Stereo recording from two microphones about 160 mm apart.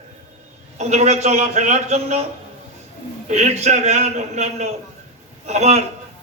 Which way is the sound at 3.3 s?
45° right (ahead or behind).